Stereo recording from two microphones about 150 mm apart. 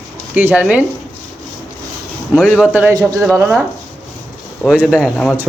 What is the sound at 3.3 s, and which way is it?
Speech, 15° right (ahead or behind).